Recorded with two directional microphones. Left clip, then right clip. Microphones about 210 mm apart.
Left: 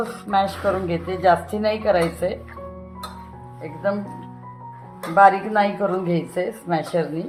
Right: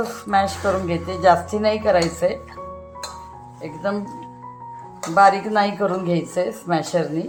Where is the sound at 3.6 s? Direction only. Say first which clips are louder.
Right 2 dB; 20° right (ahead or behind).